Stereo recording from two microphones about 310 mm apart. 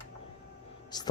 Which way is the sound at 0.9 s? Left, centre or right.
Centre.